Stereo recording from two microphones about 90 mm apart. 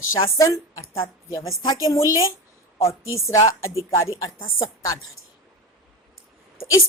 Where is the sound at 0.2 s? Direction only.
35° left (ahead or behind).